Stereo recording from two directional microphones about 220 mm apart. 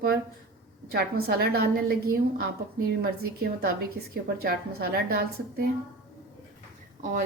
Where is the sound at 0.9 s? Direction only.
45° right (ahead or behind).